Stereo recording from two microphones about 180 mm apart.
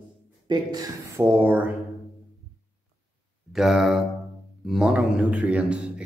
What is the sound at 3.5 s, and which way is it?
Speech, centre (ahead or behind).